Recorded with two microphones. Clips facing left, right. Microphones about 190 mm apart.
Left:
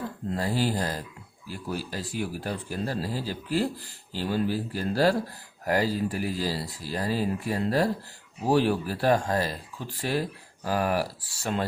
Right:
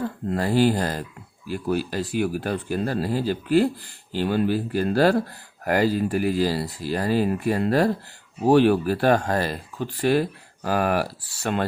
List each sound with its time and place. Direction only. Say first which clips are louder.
0.3 s speech: right 7 dB; 65° right (ahead or behind)